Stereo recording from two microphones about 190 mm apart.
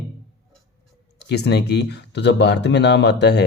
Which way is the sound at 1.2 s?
60° left (ahead or behind).